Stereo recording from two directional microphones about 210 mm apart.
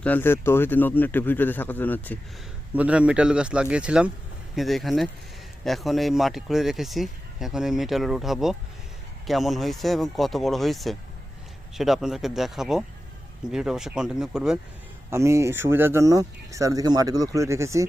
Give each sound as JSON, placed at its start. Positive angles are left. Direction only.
{"t": 0.0, "sound": "speech", "side_deg": 10}
{"t": 2.7, "sound": "speech", "side_deg": -5}
{"t": 15.1, "sound": "speech", "side_deg": -15}